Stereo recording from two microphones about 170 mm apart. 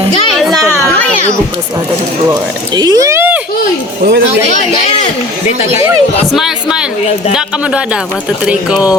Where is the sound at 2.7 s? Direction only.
25° right (ahead or behind).